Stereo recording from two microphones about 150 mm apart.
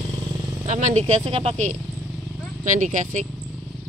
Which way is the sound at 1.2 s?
40° right (ahead or behind).